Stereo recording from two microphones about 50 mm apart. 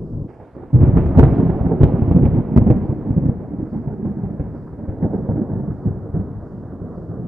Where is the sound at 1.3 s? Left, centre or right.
Centre.